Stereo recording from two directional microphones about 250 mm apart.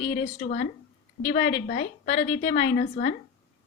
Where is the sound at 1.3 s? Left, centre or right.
Left.